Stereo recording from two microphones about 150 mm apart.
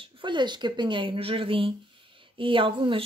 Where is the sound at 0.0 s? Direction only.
30° right (ahead or behind).